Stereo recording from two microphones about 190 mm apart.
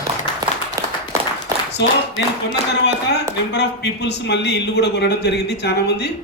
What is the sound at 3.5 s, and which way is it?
A man's voice, 65° left (ahead or behind).